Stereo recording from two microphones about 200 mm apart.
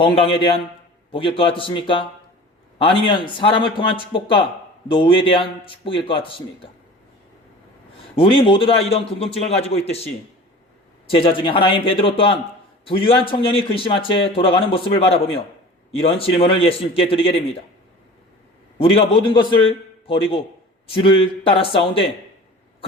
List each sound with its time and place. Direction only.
0.0 s a man's voice: 30° left (ahead or behind)
8.1 s a man's voice: 25° left (ahead or behind)
18.8 s a man's voice: 25° left (ahead or behind)